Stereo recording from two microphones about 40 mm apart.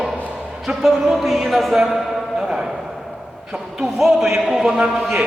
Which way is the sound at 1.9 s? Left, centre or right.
Centre.